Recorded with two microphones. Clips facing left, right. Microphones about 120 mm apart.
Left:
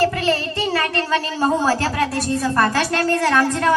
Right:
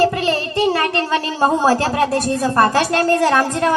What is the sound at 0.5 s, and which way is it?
Child singing, 45° right (ahead or behind).